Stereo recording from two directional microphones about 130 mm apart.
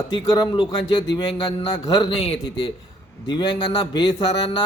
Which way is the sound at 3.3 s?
35° left (ahead or behind).